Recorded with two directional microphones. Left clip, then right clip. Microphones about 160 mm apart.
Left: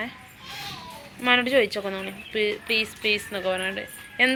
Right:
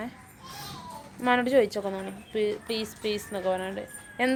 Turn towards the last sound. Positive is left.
turn(degrees=-15)  # may be behind; listen again after turning